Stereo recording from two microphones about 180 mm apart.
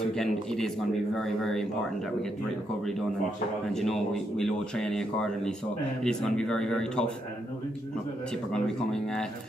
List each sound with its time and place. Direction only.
0.2 s speech: centre (ahead or behind)
3.7 s speech: centre (ahead or behind)
8.5 s speech: 5° left (ahead or behind)